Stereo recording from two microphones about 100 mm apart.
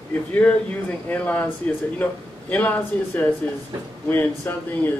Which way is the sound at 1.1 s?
15° left (ahead or behind).